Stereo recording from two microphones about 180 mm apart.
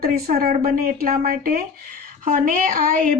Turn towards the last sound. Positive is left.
turn(degrees=-50)  # may be behind; listen again after turning